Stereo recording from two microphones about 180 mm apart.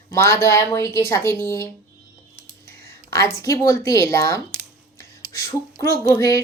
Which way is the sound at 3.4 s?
15° left (ahead or behind).